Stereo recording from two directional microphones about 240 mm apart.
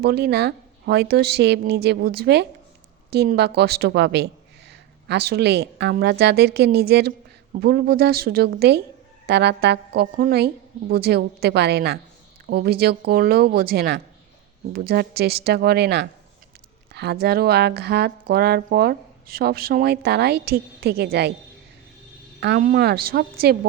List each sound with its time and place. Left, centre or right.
0.0 s a woman's voice: right
22.4 s speech: right